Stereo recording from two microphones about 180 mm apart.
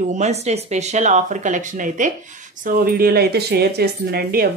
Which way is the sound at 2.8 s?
55° right (ahead or behind).